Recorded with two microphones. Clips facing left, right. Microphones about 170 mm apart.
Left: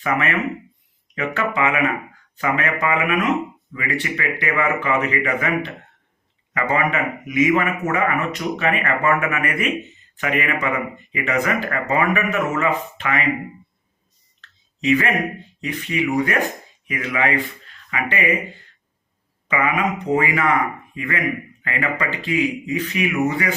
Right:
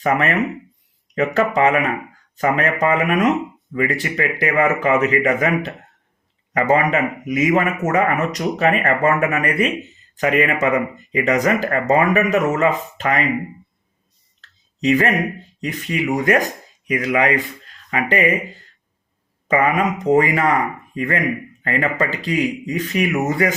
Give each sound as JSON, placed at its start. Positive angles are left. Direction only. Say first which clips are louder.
{"t": 0.0, "sound": "speech", "louder": "right 3 dB", "side_deg": -40}
{"t": 14.4, "sound": "speech", "louder": "right 2 dB", "side_deg": -40}
{"t": 19.5, "sound": "speech", "louder": "right 4 dB", "side_deg": -40}